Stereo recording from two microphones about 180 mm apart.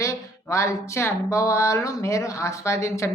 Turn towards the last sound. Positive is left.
turn(degrees=15)  # may be behind; listen again after turning